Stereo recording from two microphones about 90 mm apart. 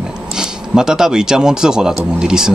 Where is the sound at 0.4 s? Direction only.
5° right (ahead or behind).